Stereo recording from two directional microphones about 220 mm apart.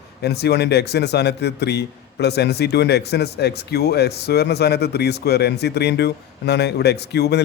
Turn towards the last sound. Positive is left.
turn(degrees=50)  # may be behind; listen again after turning